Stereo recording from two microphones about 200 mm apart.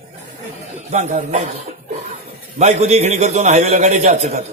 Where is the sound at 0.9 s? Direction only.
35° right (ahead or behind).